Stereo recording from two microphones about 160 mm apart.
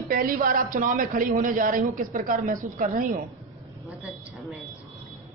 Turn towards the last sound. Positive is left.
turn(degrees=0)  # may be behind; listen again after turning